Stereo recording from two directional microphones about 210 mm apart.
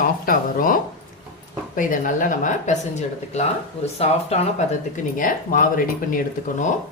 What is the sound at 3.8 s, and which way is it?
Speech, 30° left (ahead or behind).